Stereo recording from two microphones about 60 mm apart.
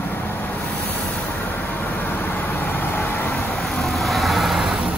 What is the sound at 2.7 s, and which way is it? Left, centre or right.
Vehicle, left.